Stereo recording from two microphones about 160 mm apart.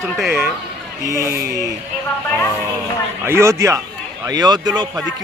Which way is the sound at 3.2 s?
15° right (ahead or behind).